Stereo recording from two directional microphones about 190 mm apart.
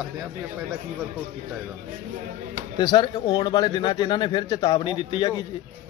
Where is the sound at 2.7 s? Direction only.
25° left (ahead or behind).